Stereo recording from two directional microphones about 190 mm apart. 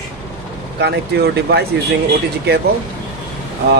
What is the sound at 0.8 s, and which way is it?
Speech, 60° right (ahead or behind).